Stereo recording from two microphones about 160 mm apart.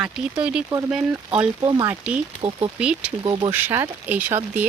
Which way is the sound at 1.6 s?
30° right (ahead or behind).